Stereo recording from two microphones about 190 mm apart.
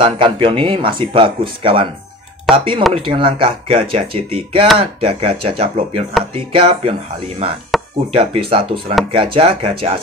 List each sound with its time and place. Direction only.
0.0 s speech: 25° right (ahead or behind)
7.7 s chop: centre (ahead or behind)
8.1 s speech: 30° right (ahead or behind)